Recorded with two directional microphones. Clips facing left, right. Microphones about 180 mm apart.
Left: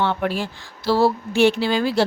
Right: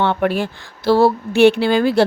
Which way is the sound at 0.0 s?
60° right (ahead or behind).